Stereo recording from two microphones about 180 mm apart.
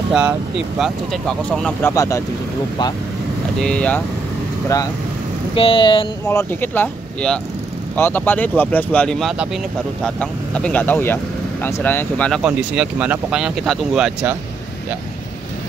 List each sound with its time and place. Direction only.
0.1 s speech: 5° right (ahead or behind)
1.8 s speech: 15° left (ahead or behind)
3.5 s speech: 5° left (ahead or behind)
5.5 s speech: 30° left (ahead or behind)
6.2 s speech: 10° left (ahead or behind)
12.4 s speech: 5° right (ahead or behind)